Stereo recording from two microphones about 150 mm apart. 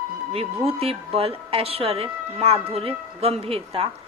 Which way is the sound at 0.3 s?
40° right (ahead or behind).